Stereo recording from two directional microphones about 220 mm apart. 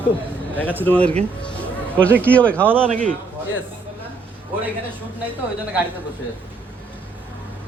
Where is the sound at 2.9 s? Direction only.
35° right (ahead or behind).